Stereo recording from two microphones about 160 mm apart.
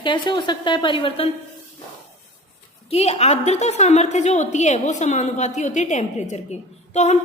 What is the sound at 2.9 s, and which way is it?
A woman's voice, 40° left (ahead or behind).